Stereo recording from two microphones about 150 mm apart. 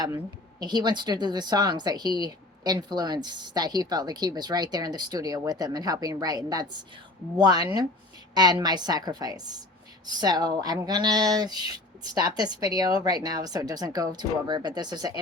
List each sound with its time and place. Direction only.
0.6 s a woman's voice: 30° right (ahead or behind)